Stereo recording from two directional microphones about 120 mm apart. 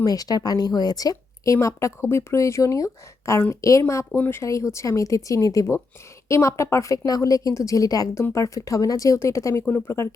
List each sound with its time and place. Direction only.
0.0 s speech: 30° left (ahead or behind)